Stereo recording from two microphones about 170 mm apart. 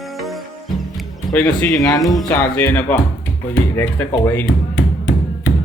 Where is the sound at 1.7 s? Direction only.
20° left (ahead or behind).